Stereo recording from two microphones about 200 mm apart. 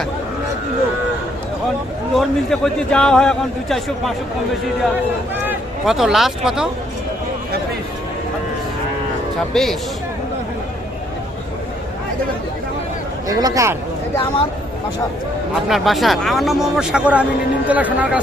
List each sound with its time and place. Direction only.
2.1 s a man's voice: 5° left (ahead or behind)
5.5 s speech: centre (ahead or behind)
9.5 s a man's voice: centre (ahead or behind)
13.2 s speech: 15° right (ahead or behind)
15.7 s a man's voice: centre (ahead or behind)